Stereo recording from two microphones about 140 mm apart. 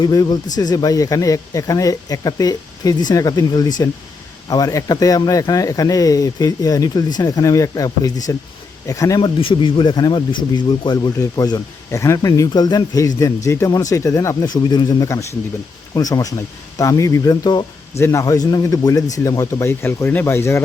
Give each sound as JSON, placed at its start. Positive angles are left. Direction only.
{"t": 0.0, "sound": "speech", "side_deg": 30}
{"t": 9.2, "sound": "speech", "side_deg": 35}